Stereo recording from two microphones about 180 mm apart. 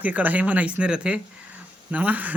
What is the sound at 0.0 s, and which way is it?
Speech, 10° right (ahead or behind).